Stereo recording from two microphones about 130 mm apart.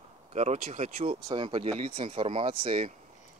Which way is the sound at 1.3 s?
40° right (ahead or behind).